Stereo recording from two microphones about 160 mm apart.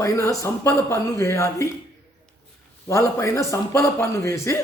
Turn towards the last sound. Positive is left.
turn(degrees=15)  # may be behind; listen again after turning